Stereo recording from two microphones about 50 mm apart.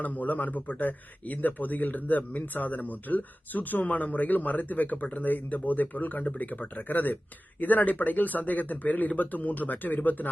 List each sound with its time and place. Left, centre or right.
0.0 s speech: left